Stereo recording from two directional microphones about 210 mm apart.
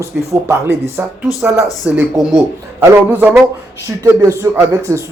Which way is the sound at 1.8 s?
5° right (ahead or behind).